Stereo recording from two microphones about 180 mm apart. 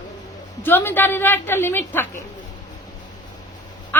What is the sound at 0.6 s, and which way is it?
A woman's voice, 10° left (ahead or behind).